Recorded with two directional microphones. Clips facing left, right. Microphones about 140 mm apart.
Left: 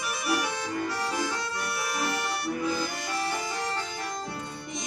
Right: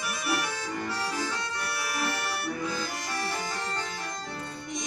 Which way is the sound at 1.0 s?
15° left (ahead or behind).